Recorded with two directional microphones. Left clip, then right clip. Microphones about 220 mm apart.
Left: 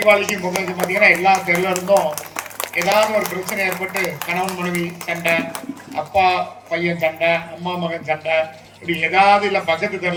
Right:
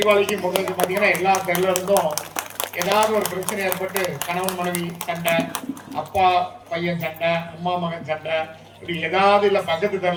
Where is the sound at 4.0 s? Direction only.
50° right (ahead or behind).